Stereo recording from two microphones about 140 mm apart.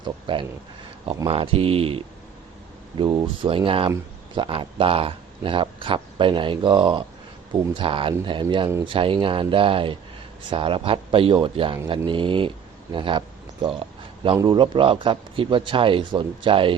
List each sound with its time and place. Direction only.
0.0 s a man's voice: 35° right (ahead or behind)